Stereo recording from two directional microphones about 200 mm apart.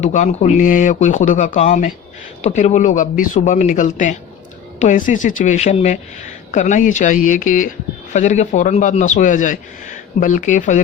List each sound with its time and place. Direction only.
0.0 s speech: 35° left (ahead or behind)